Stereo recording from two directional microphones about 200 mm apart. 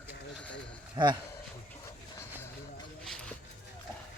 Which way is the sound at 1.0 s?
20° right (ahead or behind).